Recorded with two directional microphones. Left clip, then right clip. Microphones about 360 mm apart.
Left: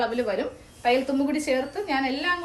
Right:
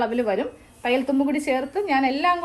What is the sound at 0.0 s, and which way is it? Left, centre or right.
A woman's voice, centre.